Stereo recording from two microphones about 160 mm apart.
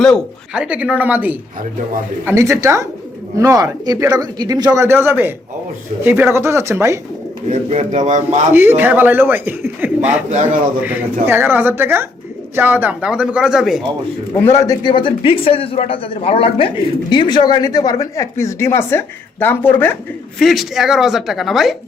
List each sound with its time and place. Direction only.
0.0 s speech: 5° left (ahead or behind)
0.6 s a man's voice: 5° right (ahead or behind)
7.4 s a man's voice: 45° right (ahead or behind)
8.5 s a man's voice: 15° right (ahead or behind)
14.4 s speech: 20° left (ahead or behind)
20.4 s speech: centre (ahead or behind)